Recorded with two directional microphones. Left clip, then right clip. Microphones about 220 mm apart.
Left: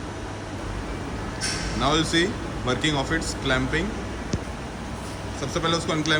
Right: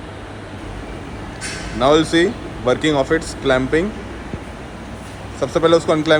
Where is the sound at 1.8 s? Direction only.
10° left (ahead or behind).